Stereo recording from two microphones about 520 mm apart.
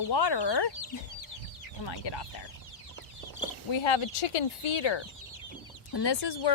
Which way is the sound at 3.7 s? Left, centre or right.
Left.